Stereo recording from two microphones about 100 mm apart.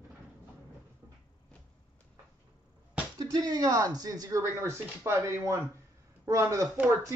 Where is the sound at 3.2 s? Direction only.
40° right (ahead or behind).